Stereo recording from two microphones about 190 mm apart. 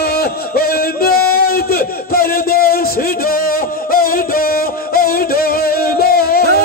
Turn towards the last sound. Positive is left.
turn(degrees=55)  # may be behind; listen again after turning